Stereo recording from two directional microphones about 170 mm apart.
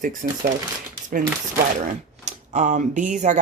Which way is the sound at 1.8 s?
45° right (ahead or behind).